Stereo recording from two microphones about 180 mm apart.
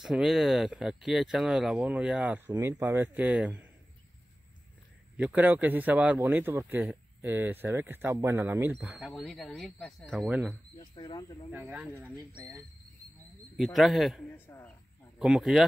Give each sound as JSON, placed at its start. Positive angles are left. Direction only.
{"t": 0.0, "sound": "speech", "side_deg": -5}
{"t": 5.1, "sound": "speech", "side_deg": -10}
{"t": 9.1, "sound": "speech", "side_deg": 0}
{"t": 10.8, "sound": "speech", "side_deg": 25}
{"t": 11.5, "sound": "speech", "side_deg": -10}
{"t": 13.7, "sound": "speech", "side_deg": 0}
{"t": 14.3, "sound": "a sound", "side_deg": 10}
{"t": 15.1, "sound": "speech", "side_deg": -5}